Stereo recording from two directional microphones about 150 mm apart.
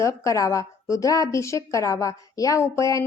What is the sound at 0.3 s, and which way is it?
A woman's voice, 20° left (ahead or behind).